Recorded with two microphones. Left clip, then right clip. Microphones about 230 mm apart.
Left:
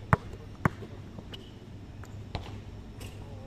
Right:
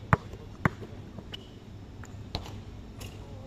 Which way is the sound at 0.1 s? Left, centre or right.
Centre.